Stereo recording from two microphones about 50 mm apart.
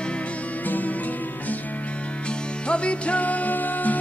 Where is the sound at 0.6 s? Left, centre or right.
Left.